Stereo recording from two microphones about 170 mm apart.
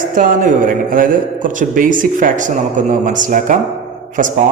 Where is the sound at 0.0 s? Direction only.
50° right (ahead or behind).